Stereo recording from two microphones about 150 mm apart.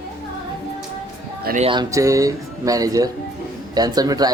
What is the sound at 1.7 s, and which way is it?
Speech, 20° right (ahead or behind).